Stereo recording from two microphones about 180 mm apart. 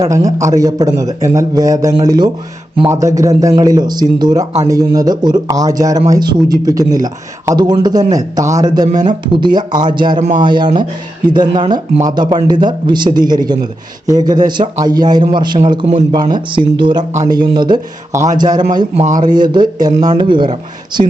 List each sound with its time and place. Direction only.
0.0 s a man's voice: 20° right (ahead or behind)
10.2 s speech: 40° right (ahead or behind)
10.4 s a man's voice: 25° right (ahead or behind)
11.9 s a man's voice: 20° right (ahead or behind)
18.9 s speech: 45° right (ahead or behind)
19.2 s a man's voice: 25° right (ahead or behind)